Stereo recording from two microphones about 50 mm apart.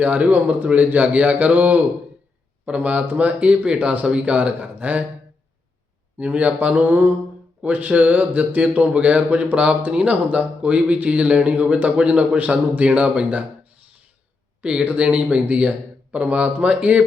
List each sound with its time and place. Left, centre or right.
0.0 s speech: right
6.1 s speech: right
14.6 s speech: right